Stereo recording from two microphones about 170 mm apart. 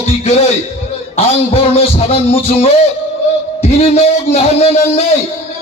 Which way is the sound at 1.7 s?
35° left (ahead or behind).